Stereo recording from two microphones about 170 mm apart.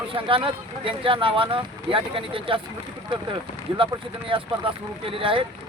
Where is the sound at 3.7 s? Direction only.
30° right (ahead or behind).